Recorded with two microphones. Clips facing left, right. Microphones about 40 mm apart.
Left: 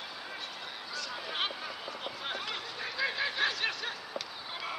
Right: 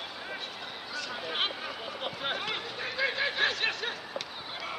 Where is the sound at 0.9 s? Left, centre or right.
Centre.